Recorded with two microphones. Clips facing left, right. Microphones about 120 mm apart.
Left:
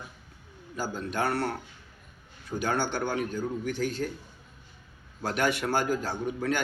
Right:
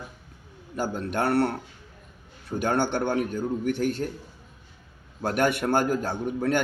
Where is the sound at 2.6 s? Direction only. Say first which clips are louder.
Right 4 dB; 55° right (ahead or behind).